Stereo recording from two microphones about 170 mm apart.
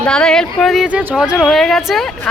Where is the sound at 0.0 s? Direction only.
5° left (ahead or behind).